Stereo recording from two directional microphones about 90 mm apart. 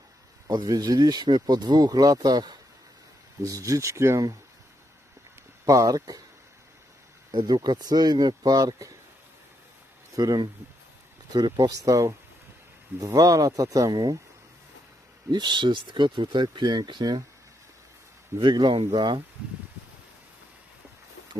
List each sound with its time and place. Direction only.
0.4 s speech: 45° right (ahead or behind)
3.4 s speech: 40° right (ahead or behind)
5.6 s speech: 40° right (ahead or behind)
7.3 s speech: 55° right (ahead or behind)
10.2 s speech: 45° right (ahead or behind)
15.3 s speech: 55° right (ahead or behind)
18.7 s speech: 80° right